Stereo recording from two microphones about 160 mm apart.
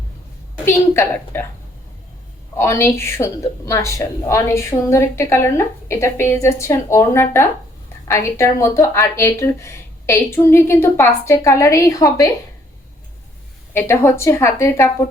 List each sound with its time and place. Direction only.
0.6 s a woman's voice: 15° left (ahead or behind)
2.6 s a woman's voice: 15° left (ahead or behind)
13.7 s a woman's voice: 10° left (ahead or behind)